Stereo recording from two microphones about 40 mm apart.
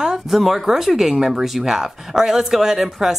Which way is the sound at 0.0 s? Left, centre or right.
Centre.